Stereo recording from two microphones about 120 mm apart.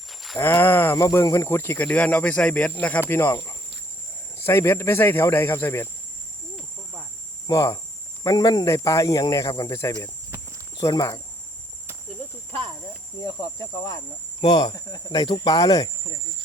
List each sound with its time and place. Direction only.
0.1 s a sound: centre (ahead or behind)
0.3 s speech: 20° left (ahead or behind)
3.1 s speech: 25° left (ahead or behind)
7.4 s speech: 25° left (ahead or behind)
10.8 s speech: 30° left (ahead or behind)
13.1 s speech: 30° left (ahead or behind)